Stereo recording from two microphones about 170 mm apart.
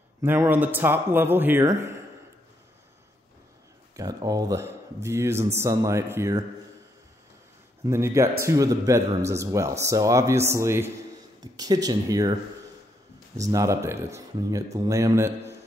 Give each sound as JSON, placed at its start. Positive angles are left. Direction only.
{"t": 0.2, "sound": "speech", "side_deg": -15}
{"t": 3.9, "sound": "speech", "side_deg": -20}
{"t": 7.8, "sound": "speech", "side_deg": -15}
{"t": 13.4, "sound": "speech", "side_deg": -20}